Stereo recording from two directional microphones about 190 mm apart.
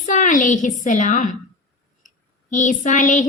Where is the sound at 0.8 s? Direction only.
40° left (ahead or behind).